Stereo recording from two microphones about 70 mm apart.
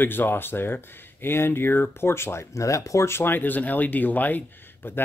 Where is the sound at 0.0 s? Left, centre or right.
Left.